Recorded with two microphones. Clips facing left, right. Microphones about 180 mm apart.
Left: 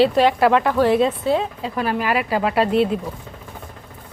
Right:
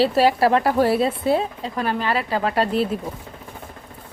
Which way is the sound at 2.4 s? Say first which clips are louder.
Left 2 dB; 35° right (ahead or behind).